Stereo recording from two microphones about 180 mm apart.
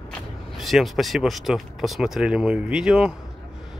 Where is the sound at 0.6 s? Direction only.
Centre (ahead or behind).